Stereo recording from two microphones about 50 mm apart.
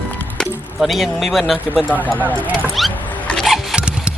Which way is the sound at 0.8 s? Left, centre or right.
Centre.